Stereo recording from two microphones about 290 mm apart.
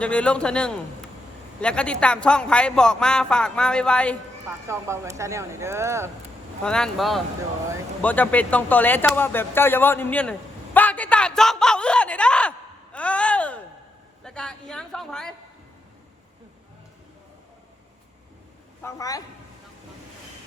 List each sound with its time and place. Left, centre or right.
0.0 s speech: centre
4.7 s speech: centre
6.7 s speech: centre
18.8 s a man's voice: centre